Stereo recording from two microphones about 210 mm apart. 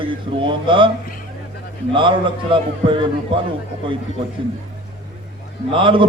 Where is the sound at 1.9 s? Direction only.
25° right (ahead or behind).